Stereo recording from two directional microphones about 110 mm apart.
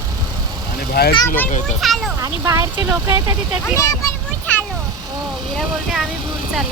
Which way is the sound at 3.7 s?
30° left (ahead or behind).